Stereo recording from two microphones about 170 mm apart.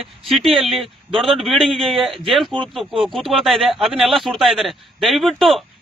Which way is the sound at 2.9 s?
30° right (ahead or behind).